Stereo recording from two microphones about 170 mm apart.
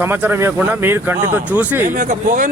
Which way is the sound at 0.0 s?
10° right (ahead or behind).